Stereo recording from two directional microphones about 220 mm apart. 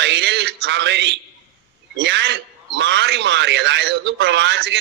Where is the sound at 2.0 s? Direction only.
50° right (ahead or behind).